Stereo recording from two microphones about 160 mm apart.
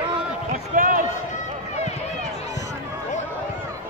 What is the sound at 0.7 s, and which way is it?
Run, 60° right (ahead or behind).